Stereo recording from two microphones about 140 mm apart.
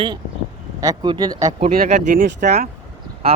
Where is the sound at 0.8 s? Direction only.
30° right (ahead or behind).